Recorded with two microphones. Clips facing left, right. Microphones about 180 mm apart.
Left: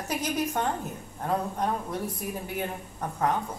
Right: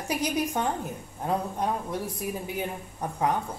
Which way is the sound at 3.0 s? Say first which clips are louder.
Right 1 dB; 10° right (ahead or behind).